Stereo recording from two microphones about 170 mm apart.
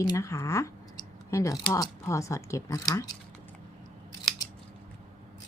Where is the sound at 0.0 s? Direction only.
20° left (ahead or behind).